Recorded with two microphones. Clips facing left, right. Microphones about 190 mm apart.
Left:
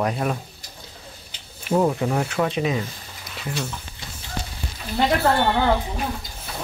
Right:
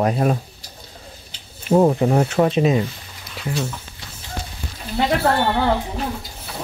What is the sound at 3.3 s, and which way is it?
Speech, centre (ahead or behind).